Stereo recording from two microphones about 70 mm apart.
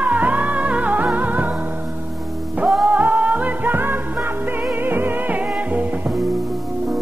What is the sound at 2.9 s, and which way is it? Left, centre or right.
Music, right.